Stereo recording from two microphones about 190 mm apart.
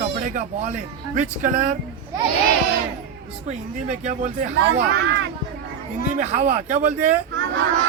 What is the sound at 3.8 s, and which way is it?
Speech, 40° right (ahead or behind).